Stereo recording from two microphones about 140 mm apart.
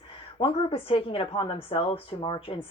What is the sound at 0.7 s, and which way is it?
Speech, 40° left (ahead or behind).